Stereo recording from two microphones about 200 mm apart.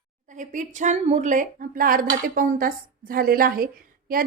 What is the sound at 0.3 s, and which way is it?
A woman's voice, 40° right (ahead or behind).